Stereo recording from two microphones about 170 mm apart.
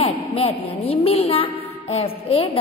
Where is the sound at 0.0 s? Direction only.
35° left (ahead or behind).